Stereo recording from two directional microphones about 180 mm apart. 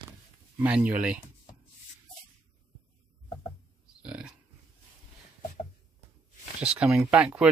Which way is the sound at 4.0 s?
5° right (ahead or behind).